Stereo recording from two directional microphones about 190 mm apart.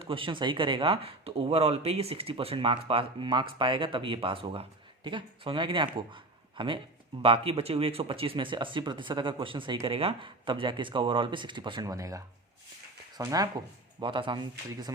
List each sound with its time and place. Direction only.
0.0 s speech: 25° right (ahead or behind)